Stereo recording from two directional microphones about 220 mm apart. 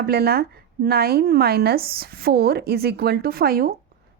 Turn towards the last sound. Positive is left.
turn(degrees=-40)  # may be behind; listen again after turning